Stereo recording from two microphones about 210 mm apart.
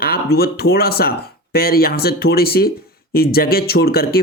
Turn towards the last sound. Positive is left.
turn(degrees=45)  # may be behind; listen again after turning